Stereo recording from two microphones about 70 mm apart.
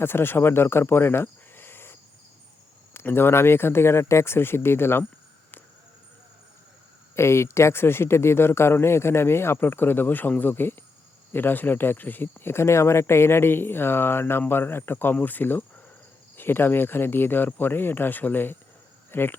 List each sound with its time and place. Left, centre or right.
0.0 s speech: left
7.2 s speech: left